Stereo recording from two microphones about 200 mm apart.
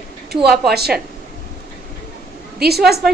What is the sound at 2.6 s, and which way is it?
Speech, 50° right (ahead or behind).